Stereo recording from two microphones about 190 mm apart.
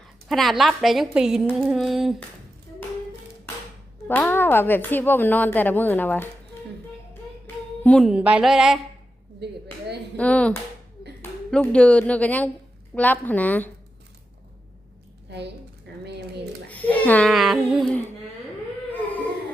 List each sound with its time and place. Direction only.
0.3 s a woman's voice: centre (ahead or behind)
4.1 s speech: 10° left (ahead or behind)
7.1 s music: 10° left (ahead or behind)
9.4 s speech: 65° right (ahead or behind)
10.2 s speech: 5° left (ahead or behind)
15.3 s a woman's voice: 65° right (ahead or behind)
16.6 s speech: 10° left (ahead or behind)